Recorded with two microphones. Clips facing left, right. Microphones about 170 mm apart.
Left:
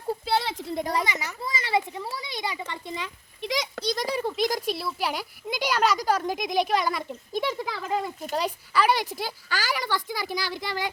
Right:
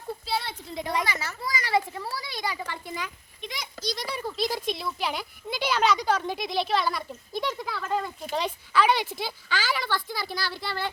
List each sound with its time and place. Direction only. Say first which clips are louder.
0.3 s a sound: left 4 dB; 80° left
0.8 s a woman's voice: left 1 dB; 40° left (ahead or behind)
1.0 s a child's voice: left 1 dB; 20° left (ahead or behind)
3.4 s a child's voice: left 6 dB; 80° left
3.9 s a woman's voice: left 6 dB; 40° left (ahead or behind)
4.2 s a child's voice: left 4 dB; 25° left (ahead or behind)
4.4 s a woman's voice: left 2 dB; 10° left (ahead or behind)